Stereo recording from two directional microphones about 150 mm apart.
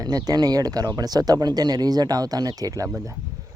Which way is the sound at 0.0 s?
25° right (ahead or behind).